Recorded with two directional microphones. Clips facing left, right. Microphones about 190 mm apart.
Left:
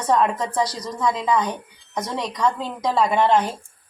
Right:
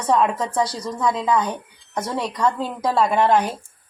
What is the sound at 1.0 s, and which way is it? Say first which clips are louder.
A woman's voice: right 1 dB; centre (ahead or behind).